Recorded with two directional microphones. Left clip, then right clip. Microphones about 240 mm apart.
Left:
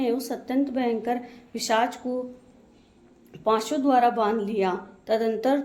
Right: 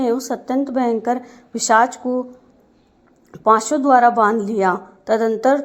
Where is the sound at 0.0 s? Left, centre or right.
Right.